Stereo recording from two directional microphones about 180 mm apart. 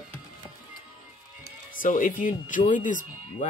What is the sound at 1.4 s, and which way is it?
Speech, 50° left (ahead or behind).